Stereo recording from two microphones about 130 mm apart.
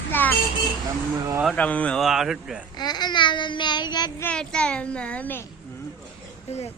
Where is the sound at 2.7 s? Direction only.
35° left (ahead or behind).